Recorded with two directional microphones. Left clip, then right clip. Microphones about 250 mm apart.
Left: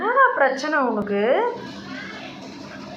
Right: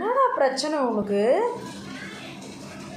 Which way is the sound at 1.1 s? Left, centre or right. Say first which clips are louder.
Left 1 dB; centre.